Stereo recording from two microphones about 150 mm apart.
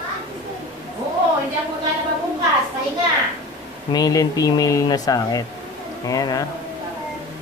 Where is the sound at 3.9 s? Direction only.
25° left (ahead or behind).